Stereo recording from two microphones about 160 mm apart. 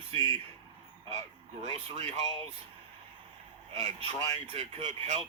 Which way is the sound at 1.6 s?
40° right (ahead or behind).